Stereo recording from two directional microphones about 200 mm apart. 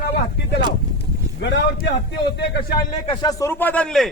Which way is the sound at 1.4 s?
60° left (ahead or behind).